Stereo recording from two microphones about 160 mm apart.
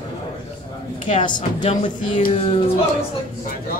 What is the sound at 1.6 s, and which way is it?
Speech, 50° left (ahead or behind).